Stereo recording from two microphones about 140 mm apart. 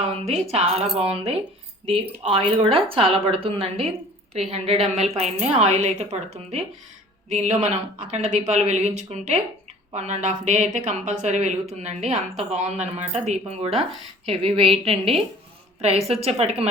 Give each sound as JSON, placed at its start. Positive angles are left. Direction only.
{"t": 0.0, "sound": "a woman's voice", "side_deg": -50}